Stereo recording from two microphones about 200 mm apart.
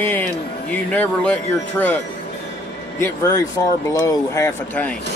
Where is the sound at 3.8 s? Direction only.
15° left (ahead or behind).